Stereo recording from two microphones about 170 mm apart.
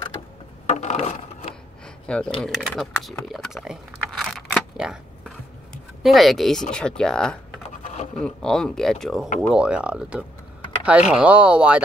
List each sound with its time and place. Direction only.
0.7 s a sound: 40° left (ahead or behind)
2.0 s speech: 5° left (ahead or behind)
3.3 s a sound: centre (ahead or behind)
6.0 s speech: centre (ahead or behind)
7.8 s scratch: 40° left (ahead or behind)
8.2 s speech: 5° left (ahead or behind)